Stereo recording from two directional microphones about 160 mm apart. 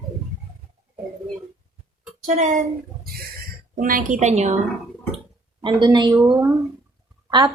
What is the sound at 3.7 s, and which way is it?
Speech, 60° right (ahead or behind).